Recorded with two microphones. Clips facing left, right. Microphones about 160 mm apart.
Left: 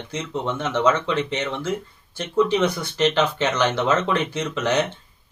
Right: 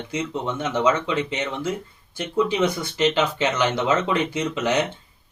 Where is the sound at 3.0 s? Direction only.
15° right (ahead or behind).